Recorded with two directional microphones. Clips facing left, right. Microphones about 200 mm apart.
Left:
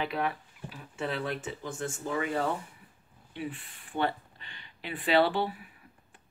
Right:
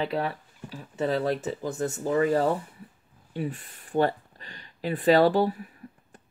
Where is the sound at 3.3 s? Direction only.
40° right (ahead or behind).